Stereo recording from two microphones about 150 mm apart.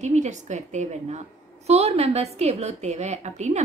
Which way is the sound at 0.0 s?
50° right (ahead or behind).